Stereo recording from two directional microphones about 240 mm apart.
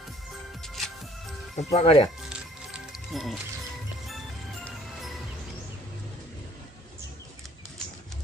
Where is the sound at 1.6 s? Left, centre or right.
Left.